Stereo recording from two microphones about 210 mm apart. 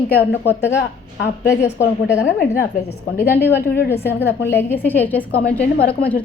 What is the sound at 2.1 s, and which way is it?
Speech, 50° left (ahead or behind).